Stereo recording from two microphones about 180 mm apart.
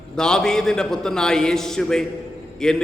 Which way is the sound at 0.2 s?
5° left (ahead or behind).